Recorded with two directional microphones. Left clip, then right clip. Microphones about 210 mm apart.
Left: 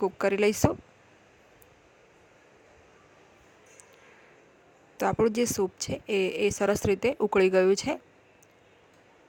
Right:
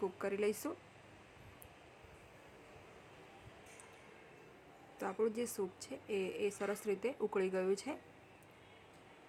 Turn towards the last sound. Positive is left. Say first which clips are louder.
# left 14 dB
turn(degrees=40)  # may be behind; listen again after turning